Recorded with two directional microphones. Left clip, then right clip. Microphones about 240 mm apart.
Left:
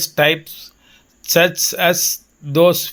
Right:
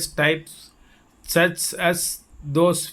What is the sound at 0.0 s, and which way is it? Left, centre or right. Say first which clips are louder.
Speech: left 6 dB; centre.